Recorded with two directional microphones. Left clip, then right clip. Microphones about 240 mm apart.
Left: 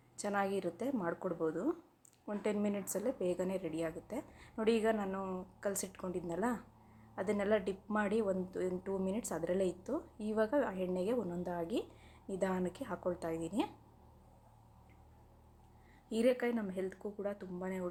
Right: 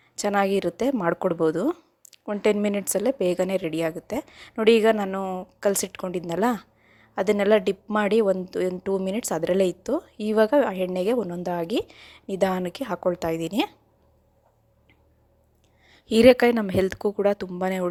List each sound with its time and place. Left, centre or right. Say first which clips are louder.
0.2 s a woman's voice: right 14 dB; right
16.0 s a woman's voice: right 17 dB; right